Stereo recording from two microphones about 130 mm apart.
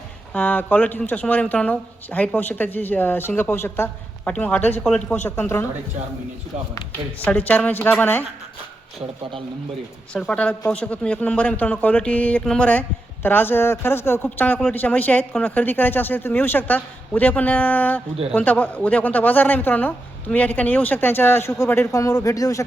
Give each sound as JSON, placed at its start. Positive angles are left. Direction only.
{"t": 0.3, "sound": "a man's voice", "side_deg": 10}
{"t": 7.3, "sound": "a man's voice", "side_deg": 10}
{"t": 10.1, "sound": "a man's voice", "side_deg": 10}